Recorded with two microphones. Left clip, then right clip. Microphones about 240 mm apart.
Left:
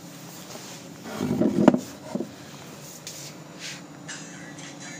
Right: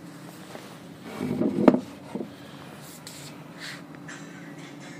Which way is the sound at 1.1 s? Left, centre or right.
Left.